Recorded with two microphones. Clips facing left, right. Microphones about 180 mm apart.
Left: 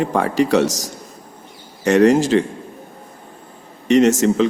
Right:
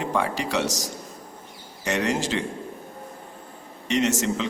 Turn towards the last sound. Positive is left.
turn(degrees=45)  # may be behind; listen again after turning